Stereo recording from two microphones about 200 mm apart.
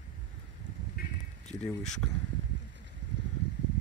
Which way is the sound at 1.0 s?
45° left (ahead or behind).